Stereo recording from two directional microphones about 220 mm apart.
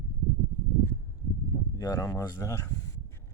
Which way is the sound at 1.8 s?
15° left (ahead or behind).